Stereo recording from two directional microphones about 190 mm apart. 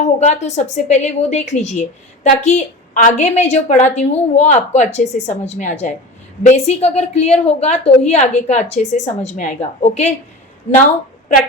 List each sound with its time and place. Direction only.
0.0 s a woman's voice: 35° left (ahead or behind)